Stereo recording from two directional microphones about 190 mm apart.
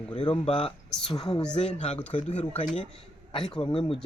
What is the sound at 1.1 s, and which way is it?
Speech, 30° left (ahead or behind).